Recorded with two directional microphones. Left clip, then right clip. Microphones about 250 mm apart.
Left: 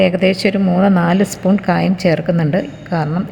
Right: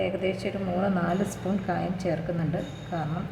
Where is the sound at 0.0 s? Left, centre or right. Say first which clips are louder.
Left 14 dB; left.